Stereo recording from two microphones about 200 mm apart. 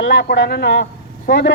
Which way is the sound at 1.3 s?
45° left (ahead or behind).